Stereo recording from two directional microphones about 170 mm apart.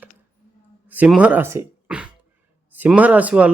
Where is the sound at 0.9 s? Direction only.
10° right (ahead or behind).